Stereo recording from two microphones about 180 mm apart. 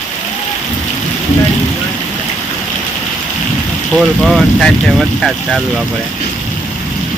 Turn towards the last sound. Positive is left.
turn(degrees=0)  # may be behind; listen again after turning